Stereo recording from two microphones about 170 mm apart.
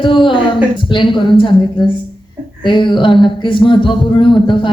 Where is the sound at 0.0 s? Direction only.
30° left (ahead or behind).